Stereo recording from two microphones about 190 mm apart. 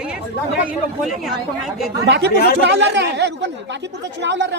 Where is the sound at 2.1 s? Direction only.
65° right (ahead or behind).